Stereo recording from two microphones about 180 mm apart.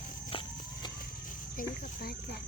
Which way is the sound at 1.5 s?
55° left (ahead or behind).